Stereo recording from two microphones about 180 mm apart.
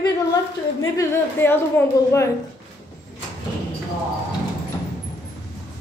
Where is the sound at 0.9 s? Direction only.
10° left (ahead or behind).